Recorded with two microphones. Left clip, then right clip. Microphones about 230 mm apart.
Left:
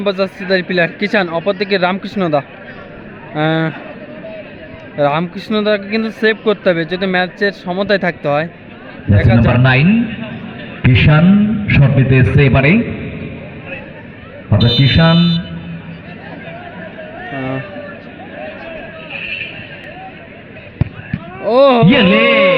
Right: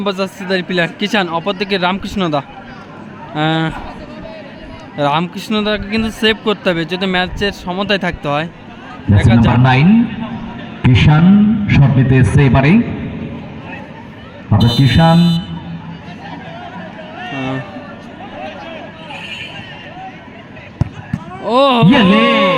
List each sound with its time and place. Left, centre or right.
0.0 s speech: centre
4.9 s speech: centre
9.5 s a man's voice: right
14.5 s speech: right
20.8 s basketball bounce: centre
21.4 s a sound: centre
21.8 s speech: right